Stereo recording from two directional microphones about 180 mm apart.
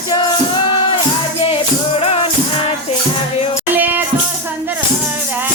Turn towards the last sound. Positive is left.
turn(degrees=-10)  # may be behind; listen again after turning